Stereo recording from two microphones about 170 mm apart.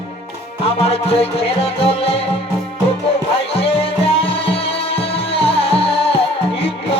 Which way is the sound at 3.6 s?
35° left (ahead or behind).